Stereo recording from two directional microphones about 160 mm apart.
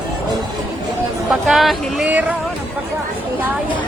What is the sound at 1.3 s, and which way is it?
Speech, centre (ahead or behind).